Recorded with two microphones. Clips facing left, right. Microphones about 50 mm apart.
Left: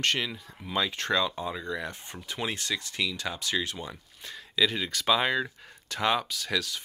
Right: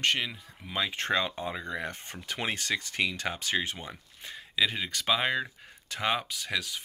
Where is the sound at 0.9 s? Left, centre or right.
Right.